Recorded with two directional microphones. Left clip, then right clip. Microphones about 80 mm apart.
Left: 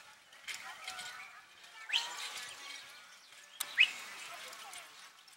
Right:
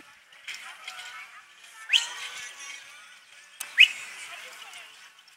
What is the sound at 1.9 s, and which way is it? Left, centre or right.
Whistle, right.